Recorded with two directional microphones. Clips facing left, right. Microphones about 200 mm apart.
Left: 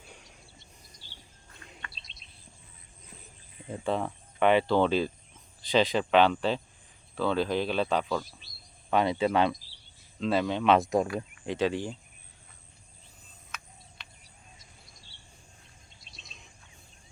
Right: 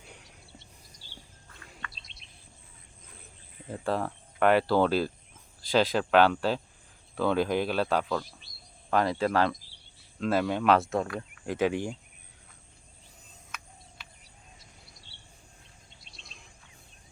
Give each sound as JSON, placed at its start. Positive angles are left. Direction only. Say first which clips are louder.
{"t": 1.8, "sound": "bird", "louder": "right 3 dB", "side_deg": 20}
{"t": 3.7, "sound": "speech", "louder": "even", "side_deg": -5}
{"t": 10.8, "sound": "speech", "louder": "left 3 dB", "side_deg": 15}
{"t": 11.4, "sound": "speech", "louder": "right 2 dB", "side_deg": -10}
{"t": 14.0, "sound": "bird", "louder": "even", "side_deg": -5}